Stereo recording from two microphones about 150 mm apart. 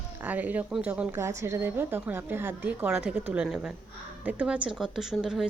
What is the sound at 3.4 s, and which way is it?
A woman's voice, centre (ahead or behind).